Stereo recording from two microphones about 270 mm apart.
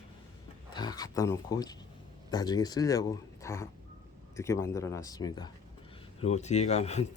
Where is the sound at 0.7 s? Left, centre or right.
Centre.